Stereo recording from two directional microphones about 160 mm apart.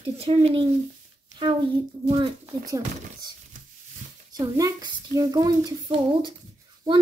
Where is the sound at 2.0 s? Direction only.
25° right (ahead or behind).